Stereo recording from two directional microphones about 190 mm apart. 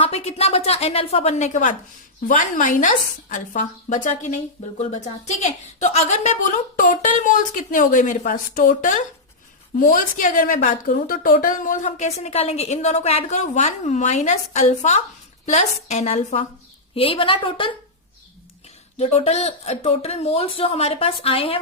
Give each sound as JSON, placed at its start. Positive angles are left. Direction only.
{"t": 0.0, "sound": "a woman's voice", "side_deg": 30}
{"t": 18.9, "sound": "a woman's voice", "side_deg": 35}